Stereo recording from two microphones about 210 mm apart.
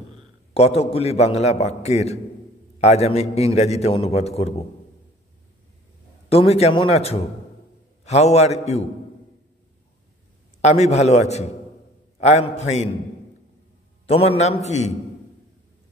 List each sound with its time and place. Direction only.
0.6 s a man's voice: 30° left (ahead or behind)
6.2 s a man's voice: 30° left (ahead or behind)
10.6 s a man's voice: 30° left (ahead or behind)
14.0 s a man's voice: 30° left (ahead or behind)